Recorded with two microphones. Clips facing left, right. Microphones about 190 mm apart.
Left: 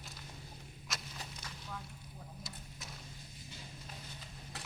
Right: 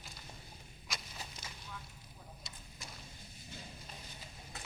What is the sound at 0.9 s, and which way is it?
Walk, centre (ahead or behind).